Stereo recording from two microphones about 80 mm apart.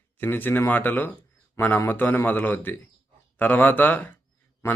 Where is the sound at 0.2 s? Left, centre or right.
Left.